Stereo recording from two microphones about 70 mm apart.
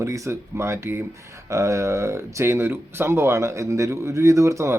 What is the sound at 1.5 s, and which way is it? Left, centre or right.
Speech, right.